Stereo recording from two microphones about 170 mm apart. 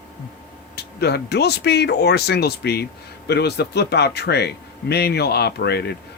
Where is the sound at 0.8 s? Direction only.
75° left (ahead or behind).